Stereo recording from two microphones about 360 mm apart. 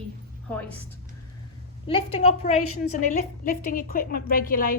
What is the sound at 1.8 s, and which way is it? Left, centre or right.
A woman's voice, centre.